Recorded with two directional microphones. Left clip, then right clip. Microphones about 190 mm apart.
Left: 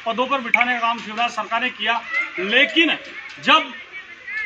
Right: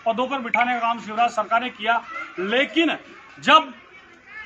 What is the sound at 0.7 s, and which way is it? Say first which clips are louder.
Speech: left 2 dB; 20° right (ahead or behind).